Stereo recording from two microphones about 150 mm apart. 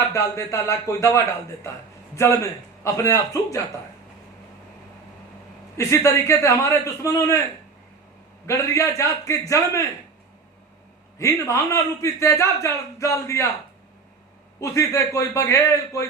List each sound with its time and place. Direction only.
0.1 s a man's voice: 20° left (ahead or behind)
5.7 s a man's voice: 20° left (ahead or behind)
8.4 s a man's voice: 20° left (ahead or behind)
11.2 s a man's voice: 20° left (ahead or behind)
14.6 s a man's voice: 20° left (ahead or behind)